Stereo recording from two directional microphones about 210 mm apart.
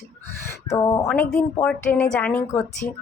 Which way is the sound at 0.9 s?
10° left (ahead or behind).